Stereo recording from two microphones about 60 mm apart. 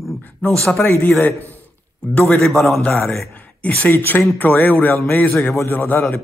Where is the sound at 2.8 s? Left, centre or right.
Left.